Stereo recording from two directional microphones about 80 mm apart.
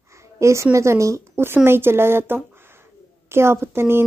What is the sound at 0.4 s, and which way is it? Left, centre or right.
A woman's voice, right.